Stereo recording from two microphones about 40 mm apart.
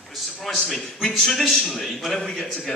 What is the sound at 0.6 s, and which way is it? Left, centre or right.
A man's voice, centre.